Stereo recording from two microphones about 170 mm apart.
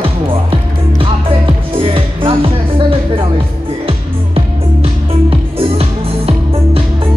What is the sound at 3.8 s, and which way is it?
Music, 35° right (ahead or behind).